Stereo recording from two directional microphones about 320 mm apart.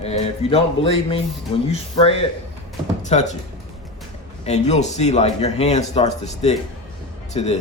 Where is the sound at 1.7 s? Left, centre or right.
Centre.